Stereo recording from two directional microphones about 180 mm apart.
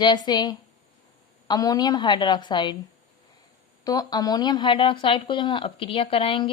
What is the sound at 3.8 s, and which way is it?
A woman's voice, 20° left (ahead or behind).